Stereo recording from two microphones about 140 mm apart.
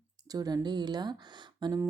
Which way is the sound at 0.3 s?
25° right (ahead or behind).